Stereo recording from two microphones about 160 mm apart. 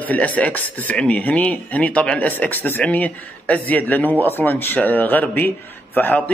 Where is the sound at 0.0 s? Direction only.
10° left (ahead or behind).